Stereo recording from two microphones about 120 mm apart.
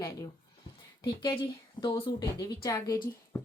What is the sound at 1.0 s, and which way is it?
A woman's voice, 45° left (ahead or behind).